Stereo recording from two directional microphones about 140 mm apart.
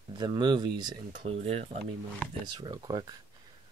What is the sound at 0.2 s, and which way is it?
Speech, 30° right (ahead or behind).